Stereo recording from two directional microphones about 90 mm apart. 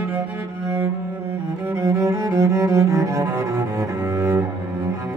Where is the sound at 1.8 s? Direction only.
35° right (ahead or behind).